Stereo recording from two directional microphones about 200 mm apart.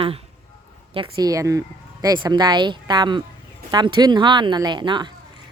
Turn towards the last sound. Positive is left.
turn(degrees=-25)  # may be behind; listen again after turning